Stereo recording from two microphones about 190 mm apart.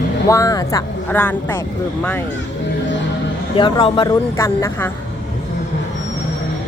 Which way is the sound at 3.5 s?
25° left (ahead or behind).